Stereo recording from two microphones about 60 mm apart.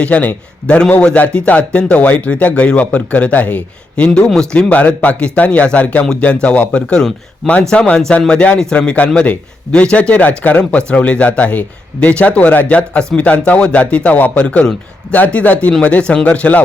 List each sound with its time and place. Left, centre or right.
0.0 s speech: left